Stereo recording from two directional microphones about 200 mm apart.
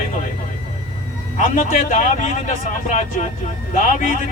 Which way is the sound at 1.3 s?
40° left (ahead or behind).